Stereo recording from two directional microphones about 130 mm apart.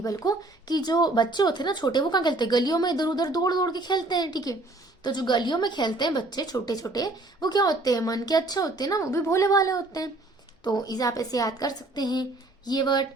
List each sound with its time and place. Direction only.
0.0 s a woman's voice: 25° left (ahead or behind)